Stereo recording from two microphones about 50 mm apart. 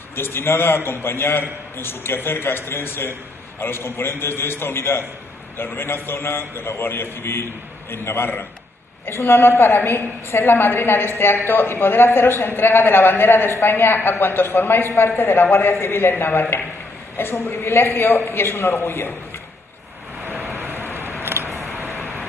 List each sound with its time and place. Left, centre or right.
0.1 s a woman's voice: left
20.2 s vehicle: right
21.2 s a sound: right